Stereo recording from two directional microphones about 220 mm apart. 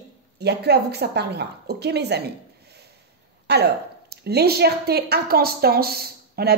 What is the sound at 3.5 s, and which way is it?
A woman's voice, 50° right (ahead or behind).